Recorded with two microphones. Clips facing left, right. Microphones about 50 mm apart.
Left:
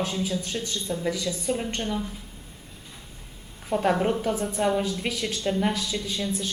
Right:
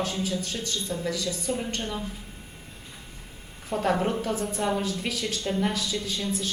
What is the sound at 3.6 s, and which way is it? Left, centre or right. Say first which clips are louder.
A woman's voice: left 2 dB; centre.